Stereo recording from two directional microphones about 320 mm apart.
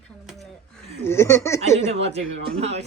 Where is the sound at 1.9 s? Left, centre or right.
Centre.